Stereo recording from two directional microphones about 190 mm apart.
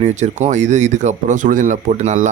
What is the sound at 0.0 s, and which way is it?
Speech, 40° right (ahead or behind).